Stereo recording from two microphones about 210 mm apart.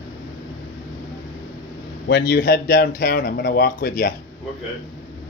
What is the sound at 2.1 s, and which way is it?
Speech, 50° left (ahead or behind).